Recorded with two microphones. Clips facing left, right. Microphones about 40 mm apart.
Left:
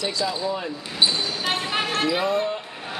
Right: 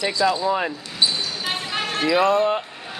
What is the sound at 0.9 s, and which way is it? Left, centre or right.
Basketball bounce, centre.